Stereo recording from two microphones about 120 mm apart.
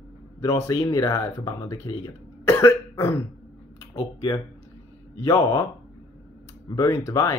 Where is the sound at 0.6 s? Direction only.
30° left (ahead or behind).